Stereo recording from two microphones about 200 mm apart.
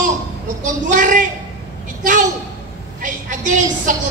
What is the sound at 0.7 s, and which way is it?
Speech, 40° right (ahead or behind).